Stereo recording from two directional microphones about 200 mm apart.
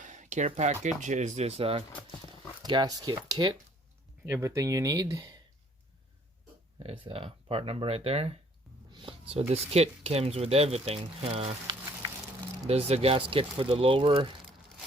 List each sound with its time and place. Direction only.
0.0 s speech: 35° right (ahead or behind)
2.6 s speech: 20° right (ahead or behind)
6.7 s speech: 25° right (ahead or behind)
8.9 s a sound: 25° right (ahead or behind)
9.5 s speech: 30° right (ahead or behind)